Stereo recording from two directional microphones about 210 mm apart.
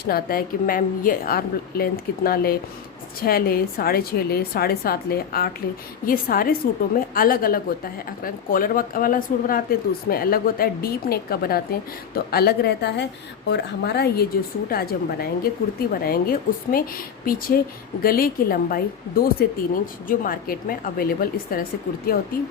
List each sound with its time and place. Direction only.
0.0 s speech: 45° left (ahead or behind)